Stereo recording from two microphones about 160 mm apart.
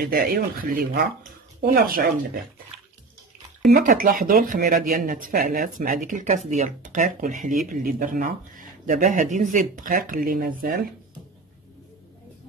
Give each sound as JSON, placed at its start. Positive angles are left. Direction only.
{"t": 0.1, "sound": "speech", "side_deg": -65}
{"t": 3.7, "sound": "speech", "side_deg": -60}